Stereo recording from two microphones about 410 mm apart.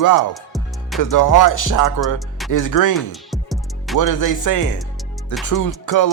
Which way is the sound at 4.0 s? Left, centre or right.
Left.